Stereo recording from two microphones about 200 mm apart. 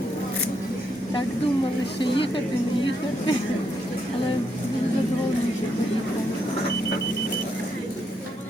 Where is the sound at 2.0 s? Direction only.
25° left (ahead or behind).